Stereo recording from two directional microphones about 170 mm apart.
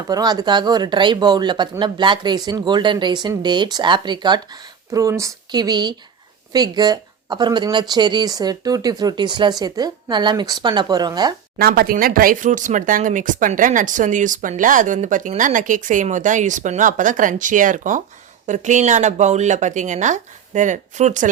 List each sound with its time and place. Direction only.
0.1 s speech: 20° right (ahead or behind)
11.5 s speech: 65° right (ahead or behind); by 21.2 s 45° right (ahead or behind)